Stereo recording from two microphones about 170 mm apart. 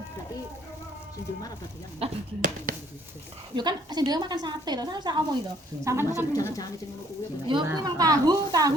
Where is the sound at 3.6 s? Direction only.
25° right (ahead or behind).